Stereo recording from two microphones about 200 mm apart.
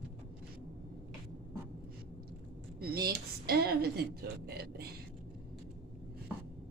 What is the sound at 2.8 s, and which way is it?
Speech, 50° right (ahead or behind).